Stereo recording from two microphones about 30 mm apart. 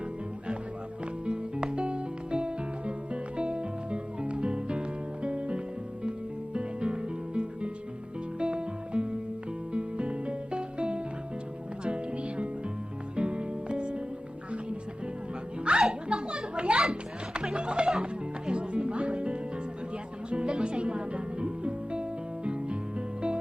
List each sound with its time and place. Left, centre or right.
1.2 s music: right
15.7 s music: right
16.0 s children playing: right
17.5 s music: right